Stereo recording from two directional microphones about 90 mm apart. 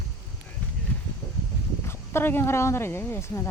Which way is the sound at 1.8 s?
25° left (ahead or behind).